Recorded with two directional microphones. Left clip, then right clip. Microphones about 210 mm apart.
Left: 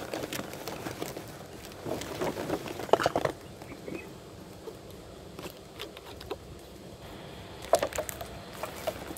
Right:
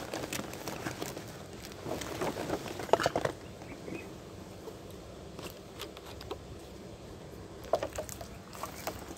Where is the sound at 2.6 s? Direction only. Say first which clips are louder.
Left 3 dB; 25° left (ahead or behind).